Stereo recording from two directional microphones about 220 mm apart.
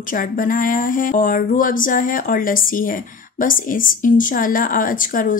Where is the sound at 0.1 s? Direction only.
40° left (ahead or behind).